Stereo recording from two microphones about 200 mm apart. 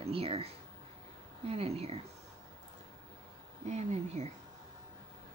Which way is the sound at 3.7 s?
35° right (ahead or behind).